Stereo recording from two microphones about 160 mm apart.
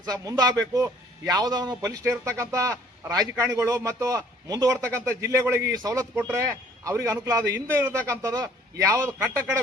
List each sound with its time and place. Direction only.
0.0 s a man's voice: 20° right (ahead or behind)